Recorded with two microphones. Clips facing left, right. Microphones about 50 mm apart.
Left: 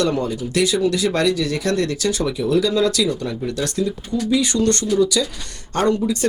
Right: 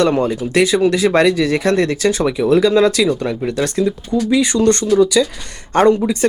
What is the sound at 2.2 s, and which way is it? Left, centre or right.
Speech, right.